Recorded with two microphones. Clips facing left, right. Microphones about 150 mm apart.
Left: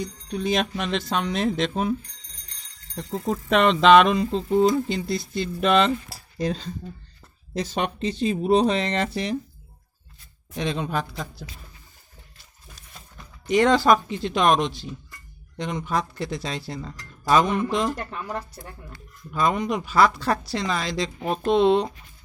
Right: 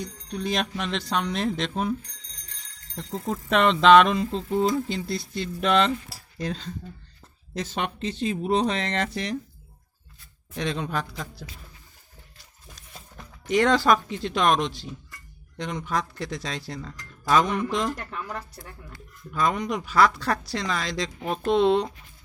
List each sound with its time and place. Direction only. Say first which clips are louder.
0.0 s speech: left 3 dB; 5° left (ahead or behind)
3.5 s speech: left 1 dB; 5° left (ahead or behind)
7.8 s speech: left 3 dB; 10° left (ahead or behind)
10.5 s speech: left 2 dB; 15° left (ahead or behind)
11.1 s speech: left 2 dB; centre (ahead or behind)
13.5 s speech: left 2 dB; 20° left (ahead or behind)